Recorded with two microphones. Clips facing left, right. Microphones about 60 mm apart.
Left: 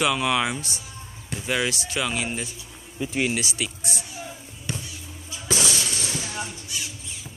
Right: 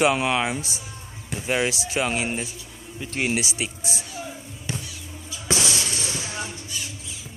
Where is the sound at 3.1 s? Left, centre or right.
Right.